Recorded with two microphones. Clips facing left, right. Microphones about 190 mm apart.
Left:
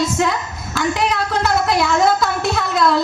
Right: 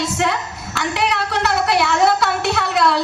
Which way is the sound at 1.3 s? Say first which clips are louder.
Even; 70° right (ahead or behind).